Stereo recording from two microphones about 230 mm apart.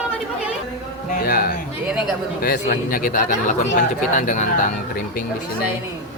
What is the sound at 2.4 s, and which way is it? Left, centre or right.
Speech, left.